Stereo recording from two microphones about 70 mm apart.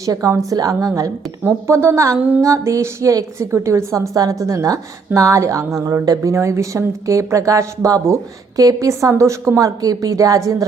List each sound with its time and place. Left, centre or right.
0.0 s a woman's voice: right
1.5 s a woman's voice: right
2.1 s music: right
2.4 s a woman's voice: right
4.1 s a woman's voice: right
6.3 s a woman's voice: right
9.6 s a woman's voice: right